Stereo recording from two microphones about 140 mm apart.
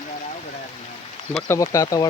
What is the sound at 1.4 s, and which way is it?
Speech, 20° left (ahead or behind).